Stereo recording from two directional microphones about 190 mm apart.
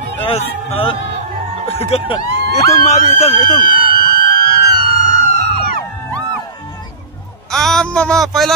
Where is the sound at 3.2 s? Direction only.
35° left (ahead or behind).